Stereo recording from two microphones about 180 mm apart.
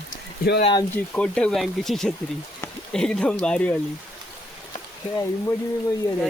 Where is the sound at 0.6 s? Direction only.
25° left (ahead or behind).